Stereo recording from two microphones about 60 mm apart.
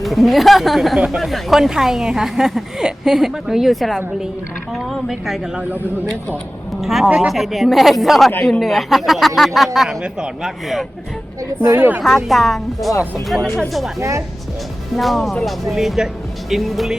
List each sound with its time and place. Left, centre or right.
0.0 s speech: centre
0.9 s a woman's voice: centre
1.2 s a woman's voice: centre
6.7 s a man's voice: centre
10.0 s a woman's voice: centre
11.8 s speech: right
12.0 s speech: centre
14.9 s speech: centre